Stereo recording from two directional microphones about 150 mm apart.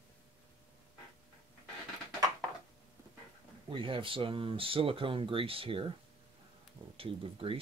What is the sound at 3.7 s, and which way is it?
Speech, 35° right (ahead or behind).